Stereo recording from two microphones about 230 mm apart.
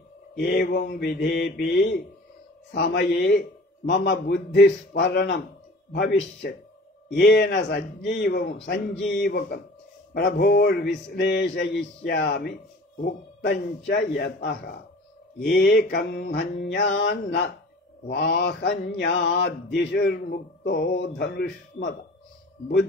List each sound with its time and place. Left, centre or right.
0.4 s mantra: left
5.9 s speech: left
7.2 s mantra: left